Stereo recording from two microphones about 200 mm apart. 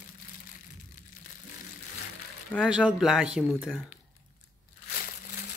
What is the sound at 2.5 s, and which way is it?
Speech, 5° right (ahead or behind).